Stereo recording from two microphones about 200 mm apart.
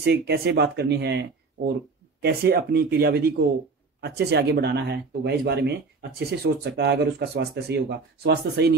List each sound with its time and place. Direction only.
0.0 s speech: 55° right (ahead or behind)